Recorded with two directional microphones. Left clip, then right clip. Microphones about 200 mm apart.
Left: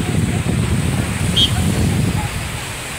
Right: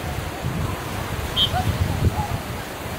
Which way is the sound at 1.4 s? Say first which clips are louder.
Left 5 dB; 50° right (ahead or behind).